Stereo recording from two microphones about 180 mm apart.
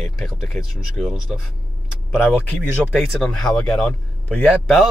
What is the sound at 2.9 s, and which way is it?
Speech, centre (ahead or behind).